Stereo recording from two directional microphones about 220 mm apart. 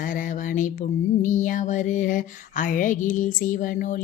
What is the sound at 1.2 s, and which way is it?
Speech, 35° left (ahead or behind).